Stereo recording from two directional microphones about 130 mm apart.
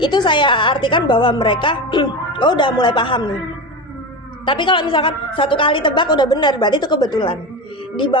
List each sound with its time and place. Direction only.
0.0 s a woman's voice: 35° left (ahead or behind)
4.4 s a woman's voice: 40° left (ahead or behind)